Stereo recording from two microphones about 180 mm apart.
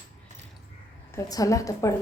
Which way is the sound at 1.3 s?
20° left (ahead or behind).